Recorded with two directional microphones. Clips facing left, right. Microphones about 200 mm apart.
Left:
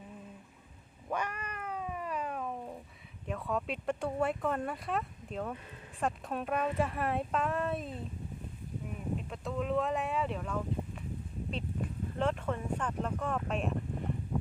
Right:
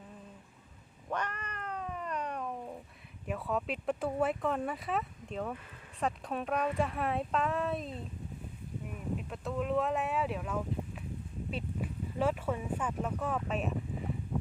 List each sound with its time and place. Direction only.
1.1 s cat: 10° left (ahead or behind)
3.2 s speech: 5° right (ahead or behind)
9.1 s speech: centre (ahead or behind)
11.5 s a sound: 5° right (ahead or behind)